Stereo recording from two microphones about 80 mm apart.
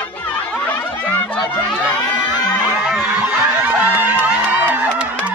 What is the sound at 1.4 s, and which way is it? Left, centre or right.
Crowd, centre.